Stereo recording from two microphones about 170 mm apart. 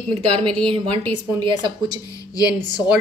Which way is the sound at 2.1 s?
20° left (ahead or behind).